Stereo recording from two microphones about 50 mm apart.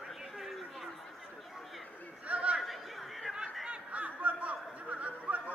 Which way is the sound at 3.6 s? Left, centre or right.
Right.